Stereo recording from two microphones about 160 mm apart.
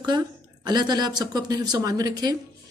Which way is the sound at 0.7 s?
25° right (ahead or behind).